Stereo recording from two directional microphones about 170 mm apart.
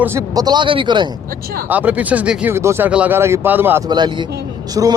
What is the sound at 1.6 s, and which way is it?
Speech, 10° right (ahead or behind).